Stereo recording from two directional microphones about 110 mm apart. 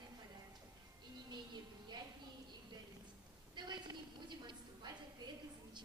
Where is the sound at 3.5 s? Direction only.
40° right (ahead or behind).